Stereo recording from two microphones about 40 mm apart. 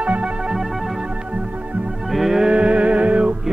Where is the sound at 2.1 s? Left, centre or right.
Centre.